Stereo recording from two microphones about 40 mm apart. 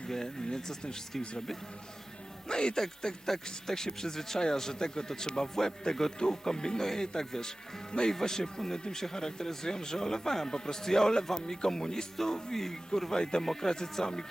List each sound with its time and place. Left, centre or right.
0.1 s speech: centre
2.5 s speech: left